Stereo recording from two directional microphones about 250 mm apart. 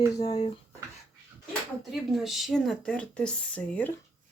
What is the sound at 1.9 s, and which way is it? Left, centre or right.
Speech, centre.